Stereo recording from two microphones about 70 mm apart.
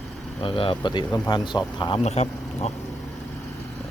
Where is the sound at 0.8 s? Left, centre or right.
Left.